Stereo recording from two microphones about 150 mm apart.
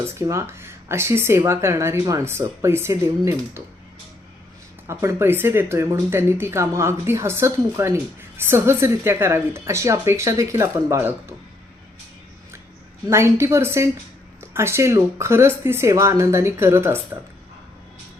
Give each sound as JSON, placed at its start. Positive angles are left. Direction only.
{"t": 0.1, "sound": "speech", "side_deg": -20}
{"t": 4.9, "sound": "speech", "side_deg": -20}
{"t": 13.1, "sound": "speech", "side_deg": -20}